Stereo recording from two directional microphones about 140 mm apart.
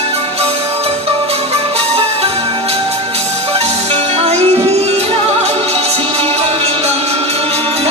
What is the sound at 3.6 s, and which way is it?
Music, 50° right (ahead or behind).